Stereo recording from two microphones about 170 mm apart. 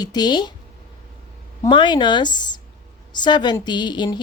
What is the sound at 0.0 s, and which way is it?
Speech, 25° left (ahead or behind).